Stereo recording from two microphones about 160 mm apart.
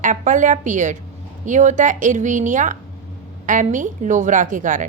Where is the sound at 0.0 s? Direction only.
50° right (ahead or behind).